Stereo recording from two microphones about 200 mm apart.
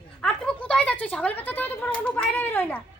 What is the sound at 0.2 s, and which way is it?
A woman's voice, 5° left (ahead or behind).